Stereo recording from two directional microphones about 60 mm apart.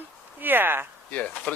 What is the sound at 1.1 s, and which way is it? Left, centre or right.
Speech, left.